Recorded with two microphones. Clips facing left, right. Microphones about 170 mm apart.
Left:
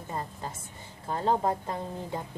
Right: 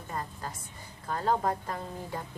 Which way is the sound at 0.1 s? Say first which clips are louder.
Left 1 dB; 25° left (ahead or behind).